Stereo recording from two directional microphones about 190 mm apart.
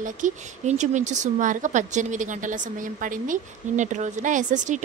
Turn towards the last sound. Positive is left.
turn(degrees=-40)  # may be behind; listen again after turning